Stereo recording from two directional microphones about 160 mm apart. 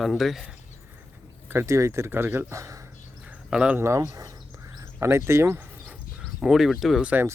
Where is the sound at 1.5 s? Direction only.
15° right (ahead or behind).